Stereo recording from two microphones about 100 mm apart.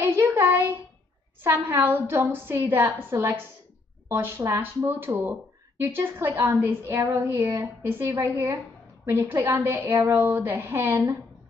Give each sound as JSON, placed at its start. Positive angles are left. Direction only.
{"t": 0.0, "sound": "child singing", "side_deg": -20}
{"t": 1.4, "sound": "speech", "side_deg": -25}